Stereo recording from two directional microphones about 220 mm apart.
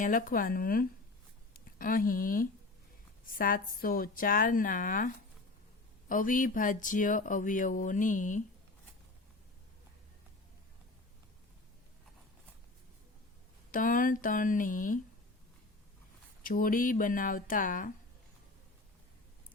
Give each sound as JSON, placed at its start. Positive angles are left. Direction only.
{"t": 0.0, "sound": "speech", "side_deg": 40}
{"t": 13.7, "sound": "speech", "side_deg": 40}
{"t": 16.4, "sound": "speech", "side_deg": 40}